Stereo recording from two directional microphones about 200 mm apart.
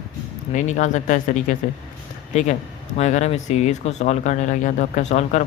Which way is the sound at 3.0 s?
35° left (ahead or behind).